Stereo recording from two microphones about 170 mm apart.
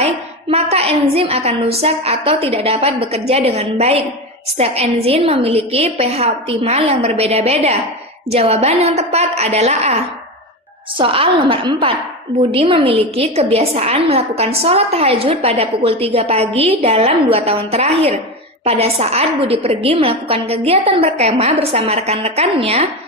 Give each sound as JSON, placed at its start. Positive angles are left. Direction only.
{"t": 0.0, "sound": "a woman's voice", "side_deg": -35}
{"t": 11.0, "sound": "a woman's voice", "side_deg": -30}